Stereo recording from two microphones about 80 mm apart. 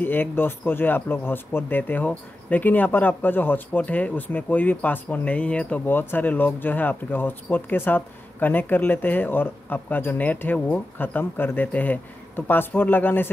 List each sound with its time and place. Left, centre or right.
0.0 s speech: left